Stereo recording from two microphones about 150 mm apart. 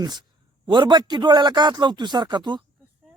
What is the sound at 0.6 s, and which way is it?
A man's voice, 30° right (ahead or behind).